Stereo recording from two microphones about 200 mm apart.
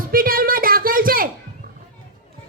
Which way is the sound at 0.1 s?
45° right (ahead or behind).